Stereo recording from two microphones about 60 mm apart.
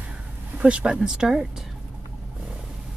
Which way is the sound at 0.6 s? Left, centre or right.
Centre.